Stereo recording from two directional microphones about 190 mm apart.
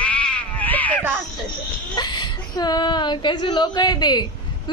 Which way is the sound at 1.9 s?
20° left (ahead or behind).